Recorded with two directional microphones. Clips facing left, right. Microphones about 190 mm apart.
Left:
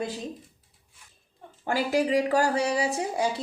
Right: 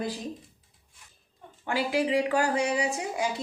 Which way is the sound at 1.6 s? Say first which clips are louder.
Left 2 dB; 40° left (ahead or behind).